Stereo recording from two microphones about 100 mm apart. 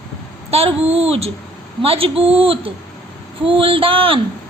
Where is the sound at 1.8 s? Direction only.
70° right (ahead or behind).